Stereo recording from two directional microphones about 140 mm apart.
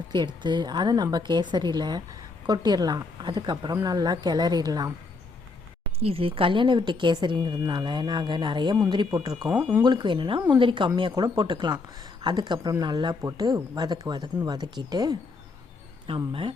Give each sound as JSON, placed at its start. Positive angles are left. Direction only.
{"t": 0.4, "sound": "a woman's voice", "side_deg": -30}
{"t": 6.0, "sound": "a woman's voice", "side_deg": -45}
{"t": 16.0, "sound": "a woman's voice", "side_deg": -40}